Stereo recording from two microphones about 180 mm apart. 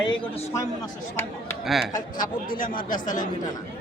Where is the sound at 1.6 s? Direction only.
Centre (ahead or behind).